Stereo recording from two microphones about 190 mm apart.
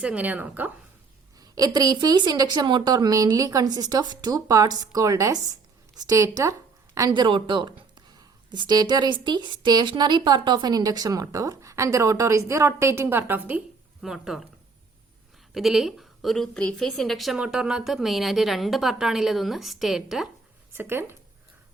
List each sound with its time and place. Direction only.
0.0 s a woman's voice: 5° right (ahead or behind)
1.4 s a woman's voice: 20° right (ahead or behind); by 14.4 s centre (ahead or behind)
15.5 s a woman's voice: centre (ahead or behind)